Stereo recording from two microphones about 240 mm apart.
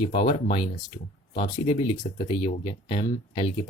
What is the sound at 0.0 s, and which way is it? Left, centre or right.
Speech, left.